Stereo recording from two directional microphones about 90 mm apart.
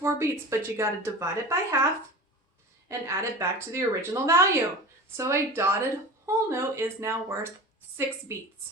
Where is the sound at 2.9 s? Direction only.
30° right (ahead or behind).